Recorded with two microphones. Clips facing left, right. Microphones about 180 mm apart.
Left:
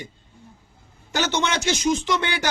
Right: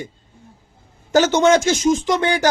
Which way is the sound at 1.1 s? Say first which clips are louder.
Right 10 dB; 45° right (ahead or behind).